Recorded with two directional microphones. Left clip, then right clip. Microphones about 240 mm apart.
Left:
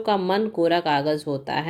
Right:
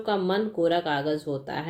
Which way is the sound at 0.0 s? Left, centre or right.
Left.